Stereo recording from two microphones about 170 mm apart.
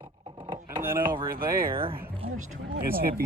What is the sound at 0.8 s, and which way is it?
Speech, 15° right (ahead or behind).